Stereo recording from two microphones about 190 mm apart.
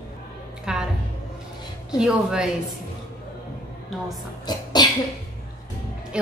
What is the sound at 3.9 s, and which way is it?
Speech, centre (ahead or behind).